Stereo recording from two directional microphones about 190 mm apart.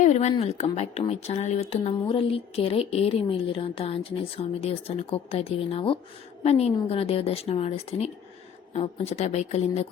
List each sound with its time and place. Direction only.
0.0 s a woman's voice: 35° left (ahead or behind)